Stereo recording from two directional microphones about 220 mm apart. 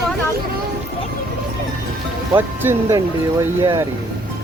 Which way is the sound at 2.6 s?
10° right (ahead or behind).